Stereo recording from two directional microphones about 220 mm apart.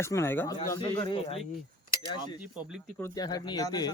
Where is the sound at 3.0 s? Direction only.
15° left (ahead or behind).